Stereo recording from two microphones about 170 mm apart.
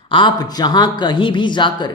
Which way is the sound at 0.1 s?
30° left (ahead or behind).